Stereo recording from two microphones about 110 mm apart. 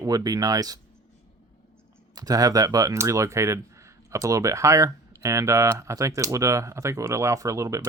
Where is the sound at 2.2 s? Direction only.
35° right (ahead or behind).